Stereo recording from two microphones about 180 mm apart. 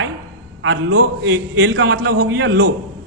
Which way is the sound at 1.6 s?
90° right.